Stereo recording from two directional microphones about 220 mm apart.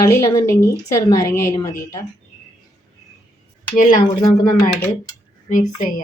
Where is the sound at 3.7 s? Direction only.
35° left (ahead or behind).